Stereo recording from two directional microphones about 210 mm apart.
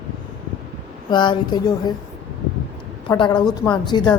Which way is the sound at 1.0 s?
20° left (ahead or behind).